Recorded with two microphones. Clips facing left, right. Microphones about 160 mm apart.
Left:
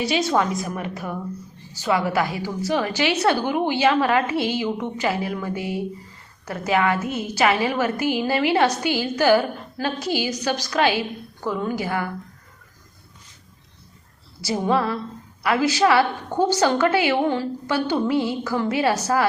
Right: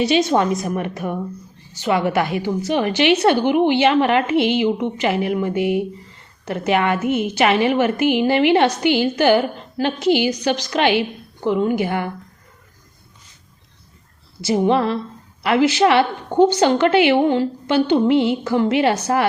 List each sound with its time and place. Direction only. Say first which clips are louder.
0.0 s a woman's voice: right 4 dB; 20° right (ahead or behind)
14.4 s a woman's voice: right 5 dB; 20° right (ahead or behind)